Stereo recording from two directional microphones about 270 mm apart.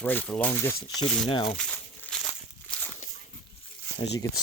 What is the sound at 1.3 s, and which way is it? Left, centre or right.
Speech, left.